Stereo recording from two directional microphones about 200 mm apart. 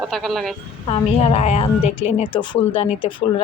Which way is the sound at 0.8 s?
25° left (ahead or behind).